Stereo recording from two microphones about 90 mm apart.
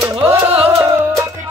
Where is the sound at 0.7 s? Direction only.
35° right (ahead or behind).